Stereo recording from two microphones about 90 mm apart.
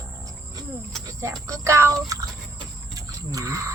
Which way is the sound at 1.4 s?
35° right (ahead or behind).